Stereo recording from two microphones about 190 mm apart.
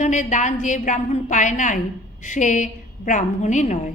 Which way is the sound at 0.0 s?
40° left (ahead or behind).